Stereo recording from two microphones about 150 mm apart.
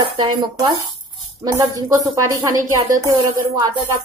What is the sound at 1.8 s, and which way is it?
A woman's voice, 20° right (ahead or behind).